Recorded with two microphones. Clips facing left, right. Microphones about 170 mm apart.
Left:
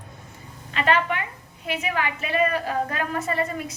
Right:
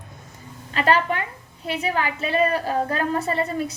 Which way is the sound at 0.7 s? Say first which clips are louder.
Right 2 dB; 35° right (ahead or behind).